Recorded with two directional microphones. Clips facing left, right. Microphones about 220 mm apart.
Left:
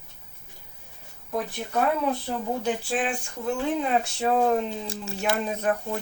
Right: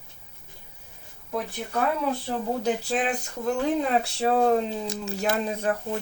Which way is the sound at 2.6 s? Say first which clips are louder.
Right 2 dB; 40° right (ahead or behind).